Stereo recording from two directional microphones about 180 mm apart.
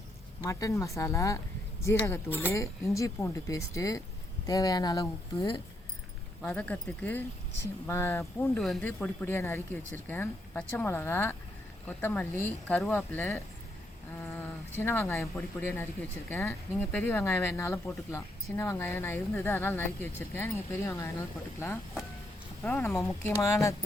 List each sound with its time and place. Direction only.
0.4 s speech: 20° left (ahead or behind)
6.4 s speech: 10° left (ahead or behind)
8.4 s speech: 5° left (ahead or behind)
14.3 s a sound: 15° left (ahead or behind)
15.4 s speech: 10° left (ahead or behind)